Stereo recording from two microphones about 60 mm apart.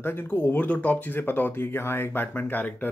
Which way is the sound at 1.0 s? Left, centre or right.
Left.